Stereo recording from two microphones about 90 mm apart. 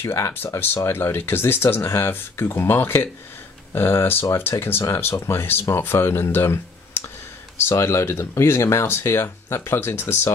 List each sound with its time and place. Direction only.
0.0 s speech: 25° left (ahead or behind)